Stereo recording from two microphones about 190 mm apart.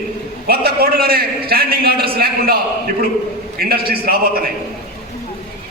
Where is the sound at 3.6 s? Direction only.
55° right (ahead or behind).